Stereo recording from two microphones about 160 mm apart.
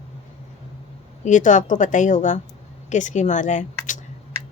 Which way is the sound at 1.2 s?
50° left (ahead or behind).